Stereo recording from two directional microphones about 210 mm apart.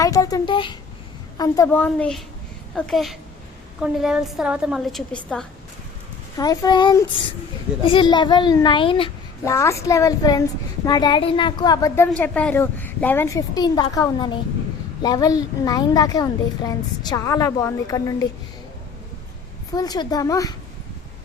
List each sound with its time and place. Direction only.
0.0 s a child's voice: 15° left (ahead or behind)
6.3 s a woman's voice: 15° left (ahead or behind)
9.4 s a woman's voice: 15° left (ahead or behind)
12.1 s a woman's voice: 5° left (ahead or behind)
19.7 s a woman's voice: 20° left (ahead or behind)